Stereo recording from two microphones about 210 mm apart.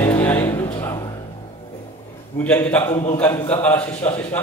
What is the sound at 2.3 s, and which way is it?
A man's voice, 10° left (ahead or behind).